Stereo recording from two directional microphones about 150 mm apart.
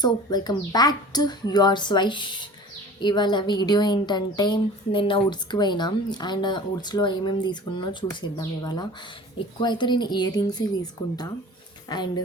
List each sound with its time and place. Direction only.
0.0 s a woman's voice: 25° left (ahead or behind)
11.9 s a woman's voice: 25° left (ahead or behind)